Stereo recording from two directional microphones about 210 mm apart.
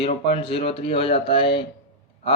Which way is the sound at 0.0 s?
25° left (ahead or behind).